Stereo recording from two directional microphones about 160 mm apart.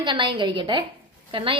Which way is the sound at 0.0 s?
30° right (ahead or behind).